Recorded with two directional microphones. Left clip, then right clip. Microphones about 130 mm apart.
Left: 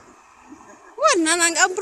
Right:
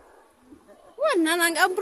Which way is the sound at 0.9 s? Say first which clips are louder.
Left 4 dB; 5° right (ahead or behind).